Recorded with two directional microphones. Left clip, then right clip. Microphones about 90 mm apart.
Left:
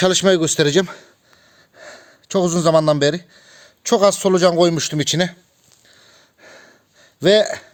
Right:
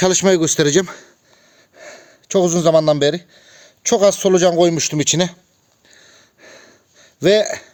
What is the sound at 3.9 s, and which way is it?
A man's voice, 20° right (ahead or behind).